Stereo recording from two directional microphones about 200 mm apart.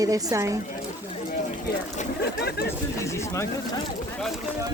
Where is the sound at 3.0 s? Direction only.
15° left (ahead or behind).